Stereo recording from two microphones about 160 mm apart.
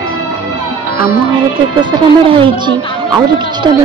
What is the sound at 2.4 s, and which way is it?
Speech, 30° right (ahead or behind).